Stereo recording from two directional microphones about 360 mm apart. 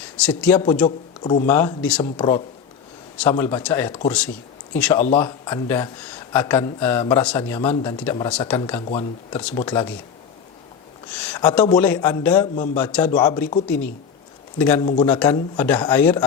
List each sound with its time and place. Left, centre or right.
0.2 s a man's voice: centre
1.5 s a man's voice: centre
11.2 s speech: centre